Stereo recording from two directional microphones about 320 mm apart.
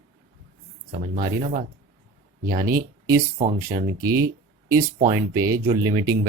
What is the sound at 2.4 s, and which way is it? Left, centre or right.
Speech, centre.